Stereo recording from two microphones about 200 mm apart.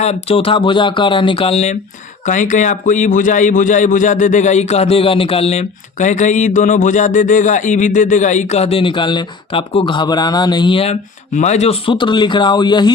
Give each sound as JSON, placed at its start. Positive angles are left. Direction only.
{"t": 0.0, "sound": "a man's voice", "side_deg": 30}